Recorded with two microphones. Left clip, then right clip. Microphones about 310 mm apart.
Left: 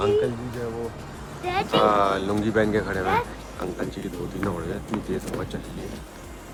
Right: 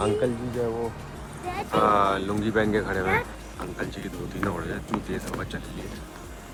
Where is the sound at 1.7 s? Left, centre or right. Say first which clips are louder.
Left 1 dB; centre.